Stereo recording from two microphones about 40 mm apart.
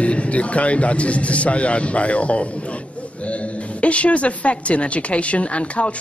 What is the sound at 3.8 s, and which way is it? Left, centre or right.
A man's voice, left.